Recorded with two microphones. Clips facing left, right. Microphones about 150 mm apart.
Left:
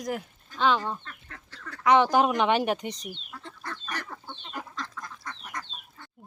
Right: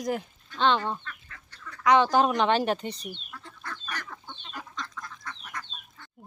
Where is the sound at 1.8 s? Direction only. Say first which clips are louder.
Even; 20° left (ahead or behind).